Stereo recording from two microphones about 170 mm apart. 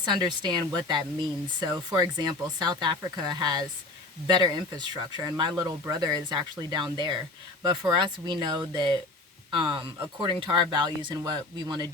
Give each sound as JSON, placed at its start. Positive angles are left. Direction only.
{"t": 0.0, "sound": "speech", "side_deg": -25}